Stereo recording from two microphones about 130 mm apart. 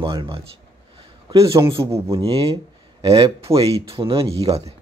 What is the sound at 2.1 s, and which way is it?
Speech, 45° right (ahead or behind).